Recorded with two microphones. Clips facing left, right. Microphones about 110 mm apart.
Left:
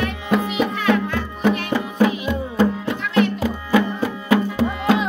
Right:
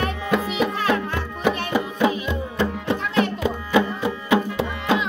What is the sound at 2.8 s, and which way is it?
Music, 35° right (ahead or behind).